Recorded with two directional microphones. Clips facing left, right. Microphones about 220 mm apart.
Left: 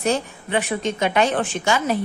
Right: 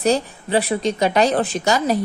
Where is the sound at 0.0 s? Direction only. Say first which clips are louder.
Right 3 dB; 35° right (ahead or behind).